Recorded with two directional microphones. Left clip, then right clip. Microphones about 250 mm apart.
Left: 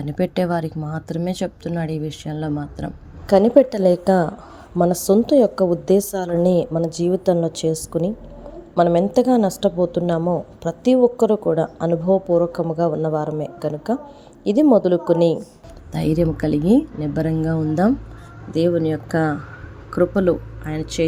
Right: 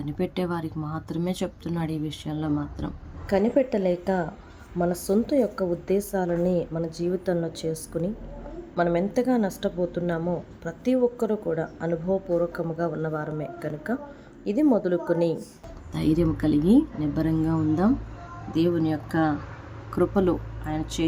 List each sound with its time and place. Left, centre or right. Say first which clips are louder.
0.0 s a woman's voice: left 8 dB; left